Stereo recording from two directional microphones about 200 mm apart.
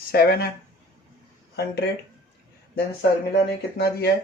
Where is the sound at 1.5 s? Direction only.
55° left (ahead or behind).